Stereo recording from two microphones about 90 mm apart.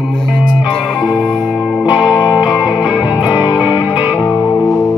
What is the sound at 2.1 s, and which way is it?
Music, 35° left (ahead or behind).